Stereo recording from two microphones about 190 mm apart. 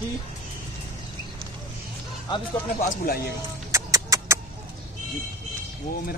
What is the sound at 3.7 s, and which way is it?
Music, 15° right (ahead or behind).